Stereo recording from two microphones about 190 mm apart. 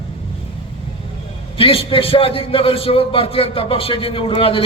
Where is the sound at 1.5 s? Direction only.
30° left (ahead or behind).